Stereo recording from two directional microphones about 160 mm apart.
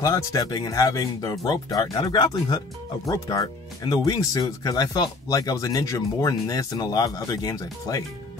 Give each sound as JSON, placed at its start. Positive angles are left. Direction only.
{"t": 0.0, "sound": "speech", "side_deg": 20}